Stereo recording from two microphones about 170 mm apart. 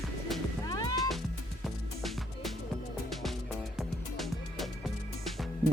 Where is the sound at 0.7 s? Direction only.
20° left (ahead or behind).